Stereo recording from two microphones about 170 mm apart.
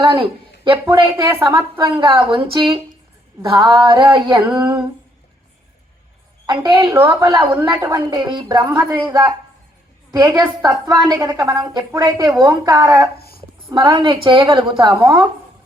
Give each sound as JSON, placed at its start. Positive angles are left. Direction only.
{"t": 0.0, "sound": "a woman's voice", "side_deg": -25}
{"t": 6.4, "sound": "a woman's voice", "side_deg": -25}
{"t": 13.1, "sound": "speech", "side_deg": 65}
{"t": 13.7, "sound": "a woman's voice", "side_deg": -30}